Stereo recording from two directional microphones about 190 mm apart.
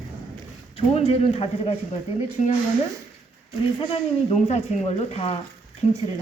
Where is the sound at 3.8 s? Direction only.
30° left (ahead or behind).